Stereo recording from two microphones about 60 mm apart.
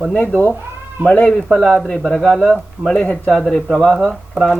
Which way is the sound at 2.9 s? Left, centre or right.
Centre.